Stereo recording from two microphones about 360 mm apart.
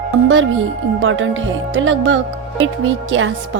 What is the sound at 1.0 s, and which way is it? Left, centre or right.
A woman's voice, right.